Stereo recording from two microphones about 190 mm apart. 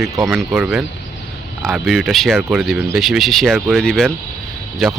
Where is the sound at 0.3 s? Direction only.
5° right (ahead or behind).